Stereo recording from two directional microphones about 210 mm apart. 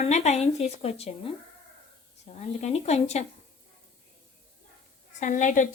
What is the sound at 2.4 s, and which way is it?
Speech, 30° left (ahead or behind).